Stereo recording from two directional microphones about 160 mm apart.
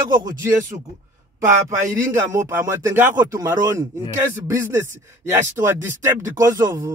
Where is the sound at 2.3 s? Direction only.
20° right (ahead or behind).